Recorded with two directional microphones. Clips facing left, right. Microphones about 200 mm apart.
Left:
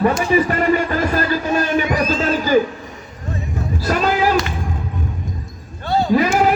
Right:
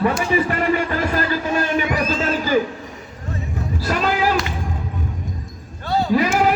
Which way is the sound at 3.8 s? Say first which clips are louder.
Left 3 dB; 45° left (ahead or behind).